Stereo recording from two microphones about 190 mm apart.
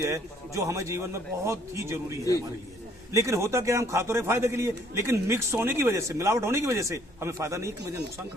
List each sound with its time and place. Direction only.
0.0 s a man's voice: 15° right (ahead or behind)
3.1 s a man's voice: 15° right (ahead or behind)